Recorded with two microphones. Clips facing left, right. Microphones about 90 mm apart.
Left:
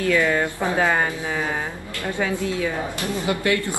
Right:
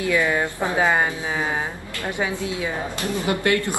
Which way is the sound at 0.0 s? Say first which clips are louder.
Left 1 dB; 15° right (ahead or behind).